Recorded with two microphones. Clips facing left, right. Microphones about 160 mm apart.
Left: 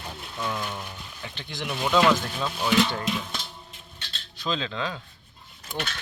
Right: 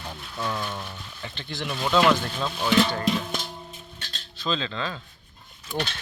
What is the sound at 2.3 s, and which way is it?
Speech, 10° left (ahead or behind).